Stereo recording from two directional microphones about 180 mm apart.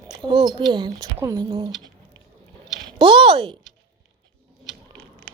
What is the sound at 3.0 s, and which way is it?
Speech, 30° right (ahead or behind).